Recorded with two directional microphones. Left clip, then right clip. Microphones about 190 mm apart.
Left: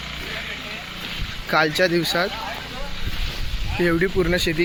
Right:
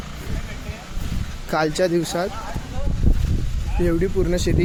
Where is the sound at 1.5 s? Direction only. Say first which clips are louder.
Left 1 dB; 10° right (ahead or behind).